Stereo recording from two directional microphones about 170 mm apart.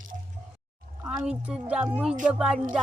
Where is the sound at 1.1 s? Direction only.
10° right (ahead or behind).